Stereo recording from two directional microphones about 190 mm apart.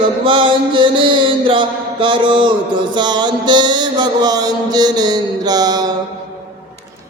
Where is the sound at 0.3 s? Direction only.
25° right (ahead or behind).